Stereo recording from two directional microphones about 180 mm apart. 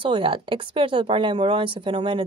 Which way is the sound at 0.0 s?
30° right (ahead or behind).